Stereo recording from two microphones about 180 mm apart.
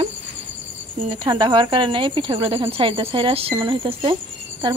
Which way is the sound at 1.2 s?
25° right (ahead or behind).